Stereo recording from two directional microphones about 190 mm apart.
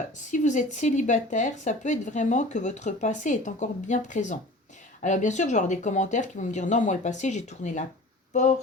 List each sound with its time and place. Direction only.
0.3 s speech: 40° left (ahead or behind)